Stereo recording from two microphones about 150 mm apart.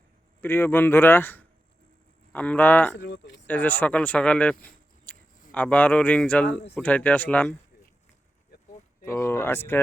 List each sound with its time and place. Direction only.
0.4 s speech: 15° left (ahead or behind)
9.0 s speech: 15° left (ahead or behind)